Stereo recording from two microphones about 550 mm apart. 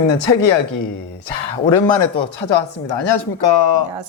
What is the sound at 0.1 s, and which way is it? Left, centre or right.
Speech, left.